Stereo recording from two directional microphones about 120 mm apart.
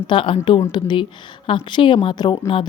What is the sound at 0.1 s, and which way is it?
A woman's voice, 45° left (ahead or behind).